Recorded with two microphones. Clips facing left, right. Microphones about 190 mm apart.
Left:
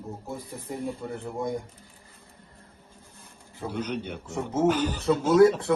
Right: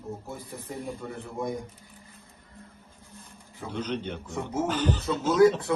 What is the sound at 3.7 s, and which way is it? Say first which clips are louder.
A man's voice: even; 10° left (ahead or behind).